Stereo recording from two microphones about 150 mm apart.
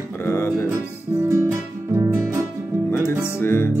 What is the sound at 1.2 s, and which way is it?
Music, 20° right (ahead or behind).